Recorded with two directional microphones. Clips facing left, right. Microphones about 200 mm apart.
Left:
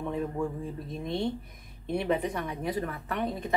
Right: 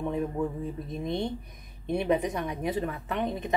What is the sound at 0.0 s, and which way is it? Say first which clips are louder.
A woman's voice: right 2 dB; 20° right (ahead or behind).